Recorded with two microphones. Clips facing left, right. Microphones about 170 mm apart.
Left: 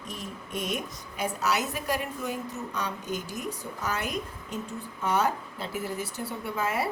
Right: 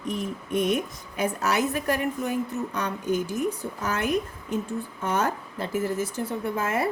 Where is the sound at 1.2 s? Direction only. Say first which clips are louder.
Right 4 dB; 55° right (ahead or behind).